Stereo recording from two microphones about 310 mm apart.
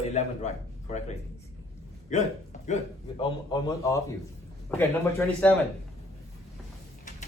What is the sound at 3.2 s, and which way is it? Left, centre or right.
Speech, centre.